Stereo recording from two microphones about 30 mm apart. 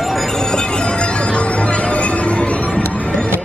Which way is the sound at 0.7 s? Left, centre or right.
Left.